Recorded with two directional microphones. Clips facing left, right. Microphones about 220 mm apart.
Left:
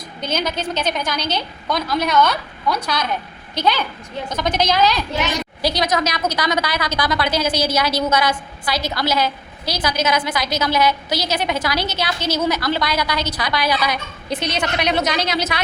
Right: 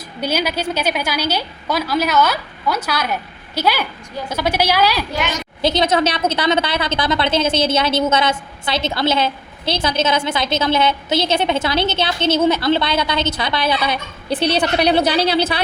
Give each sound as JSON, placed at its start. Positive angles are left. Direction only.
{"t": 0.2, "sound": "a woman's voice", "side_deg": -10}
{"t": 5.6, "sound": "a woman's voice", "side_deg": -25}